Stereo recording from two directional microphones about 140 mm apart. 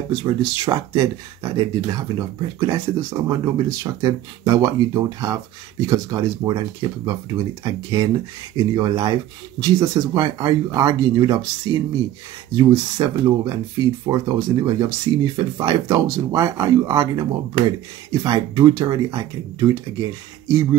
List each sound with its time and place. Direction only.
0.1 s speech: 30° right (ahead or behind)